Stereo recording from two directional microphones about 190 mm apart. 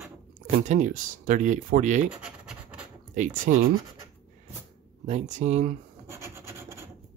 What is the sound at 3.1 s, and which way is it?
Speech, 45° right (ahead or behind).